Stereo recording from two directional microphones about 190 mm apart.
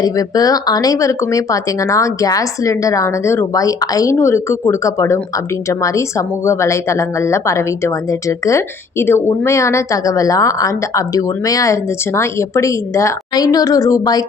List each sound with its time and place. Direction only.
0.0 s speech: 20° left (ahead or behind)